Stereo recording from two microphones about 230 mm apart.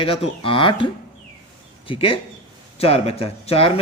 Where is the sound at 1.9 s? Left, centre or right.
Left.